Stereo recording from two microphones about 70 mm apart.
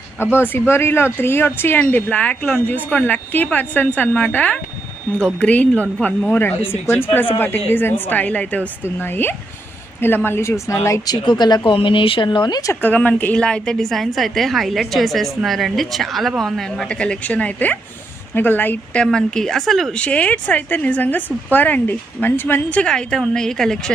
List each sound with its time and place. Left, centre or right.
0.2 s speech: left
5.1 s a woman's voice: centre
9.0 s speech: left
11.0 s speech: left
12.8 s a woman's voice: left
19.1 s a woman's voice: centre
19.9 s speech: centre
22.7 s a woman's voice: centre